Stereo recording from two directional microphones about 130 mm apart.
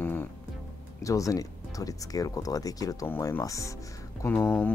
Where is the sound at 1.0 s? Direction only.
25° left (ahead or behind).